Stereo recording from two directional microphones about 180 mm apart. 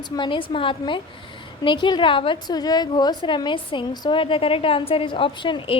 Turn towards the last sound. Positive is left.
turn(degrees=25)  # may be behind; listen again after turning